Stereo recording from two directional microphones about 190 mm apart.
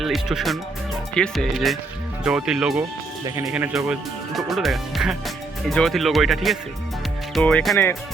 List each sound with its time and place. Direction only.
0.0 s speech: centre (ahead or behind)
3.2 s speech: 15° right (ahead or behind)
3.5 s speech: 5° right (ahead or behind)